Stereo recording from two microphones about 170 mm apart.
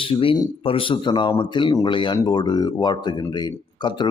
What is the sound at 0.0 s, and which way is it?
Speech, 30° left (ahead or behind).